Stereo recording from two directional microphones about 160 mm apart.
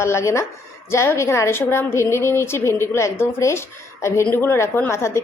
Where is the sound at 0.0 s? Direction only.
15° left (ahead or behind).